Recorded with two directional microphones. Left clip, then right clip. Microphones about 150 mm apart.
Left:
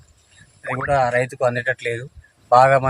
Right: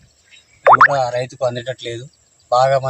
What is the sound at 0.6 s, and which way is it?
Plop, 75° right (ahead or behind).